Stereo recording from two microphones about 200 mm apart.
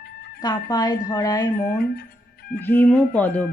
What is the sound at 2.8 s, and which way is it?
Speech, 5° left (ahead or behind).